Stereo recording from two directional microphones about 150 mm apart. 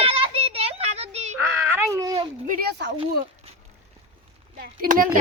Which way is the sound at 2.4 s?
70° right (ahead or behind).